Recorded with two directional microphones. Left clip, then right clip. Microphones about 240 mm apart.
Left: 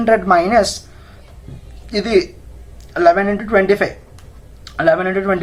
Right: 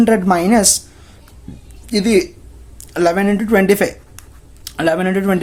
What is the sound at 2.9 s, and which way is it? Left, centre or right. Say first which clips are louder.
Speech: left 3 dB; right.